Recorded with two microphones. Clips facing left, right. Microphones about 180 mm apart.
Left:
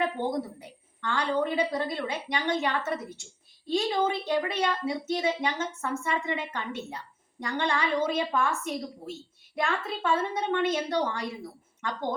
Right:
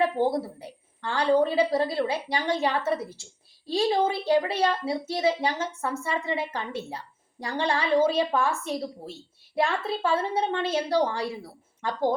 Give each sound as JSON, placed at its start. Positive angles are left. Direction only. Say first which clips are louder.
{"t": 0.0, "sound": "a woman's voice", "louder": "right 4 dB", "side_deg": -30}